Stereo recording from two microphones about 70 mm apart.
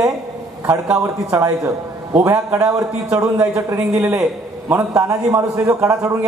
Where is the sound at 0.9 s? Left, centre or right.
Right.